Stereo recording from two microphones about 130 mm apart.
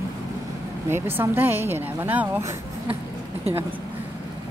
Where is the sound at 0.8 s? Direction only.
15° right (ahead or behind).